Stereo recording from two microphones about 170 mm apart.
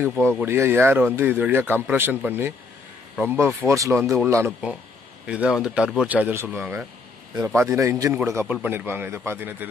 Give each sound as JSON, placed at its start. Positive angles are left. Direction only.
{"t": 0.0, "sound": "speech", "side_deg": -15}
{"t": 4.5, "sound": "speech", "side_deg": -5}